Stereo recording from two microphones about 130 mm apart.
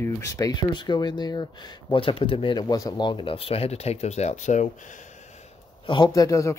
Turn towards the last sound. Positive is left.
turn(degrees=25)  # may be behind; listen again after turning